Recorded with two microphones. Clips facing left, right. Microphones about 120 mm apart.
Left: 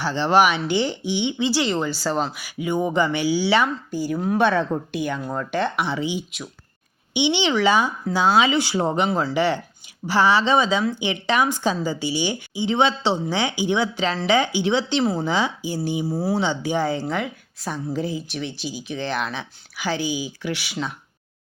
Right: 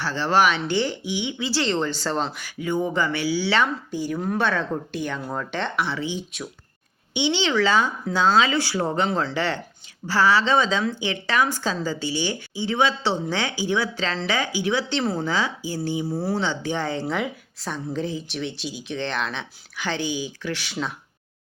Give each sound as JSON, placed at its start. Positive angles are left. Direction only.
{"t": 0.0, "sound": "speech", "side_deg": 20}
{"t": 1.0, "sound": "speech", "side_deg": 25}
{"t": 5.7, "sound": "speech", "side_deg": 15}
{"t": 9.0, "sound": "speech", "side_deg": 10}